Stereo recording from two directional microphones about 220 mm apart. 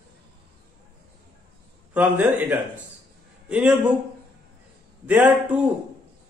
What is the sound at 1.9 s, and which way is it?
A man's voice, 5° right (ahead or behind).